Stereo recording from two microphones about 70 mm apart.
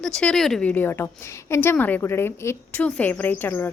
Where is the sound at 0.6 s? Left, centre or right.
Left.